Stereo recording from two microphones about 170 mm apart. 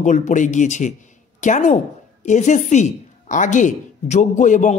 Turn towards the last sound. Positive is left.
turn(degrees=45)  # may be behind; listen again after turning